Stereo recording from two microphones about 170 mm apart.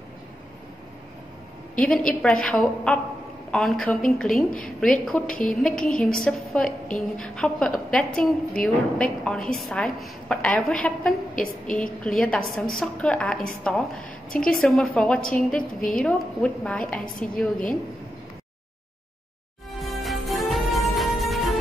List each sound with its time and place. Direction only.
1.8 s a woman's voice: 5° left (ahead or behind)
5.2 s a woman's voice: 55° left (ahead or behind)
5.5 s a woman's voice: 5° left (ahead or behind)
11.3 s a woman's voice: 50° left (ahead or behind)
11.7 s a woman's voice: 5° left (ahead or behind)
19.8 s music: centre (ahead or behind)